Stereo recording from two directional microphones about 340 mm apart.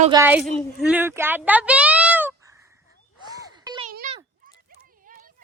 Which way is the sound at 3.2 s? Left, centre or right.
Centre.